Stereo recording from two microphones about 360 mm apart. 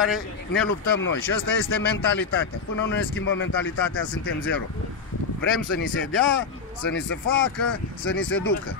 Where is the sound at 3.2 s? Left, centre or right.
Left.